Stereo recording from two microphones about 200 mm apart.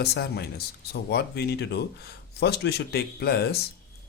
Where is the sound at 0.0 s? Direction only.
55° left (ahead or behind).